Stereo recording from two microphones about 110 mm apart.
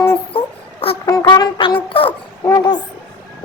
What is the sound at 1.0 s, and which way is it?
Music, 35° left (ahead or behind).